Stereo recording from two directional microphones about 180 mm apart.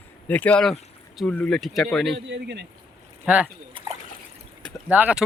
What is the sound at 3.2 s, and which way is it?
Speech, 5° right (ahead or behind).